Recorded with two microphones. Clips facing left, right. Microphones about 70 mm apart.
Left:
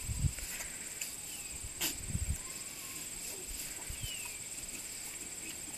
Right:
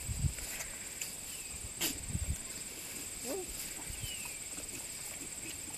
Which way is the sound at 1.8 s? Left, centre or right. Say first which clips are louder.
Right 2 dB; centre.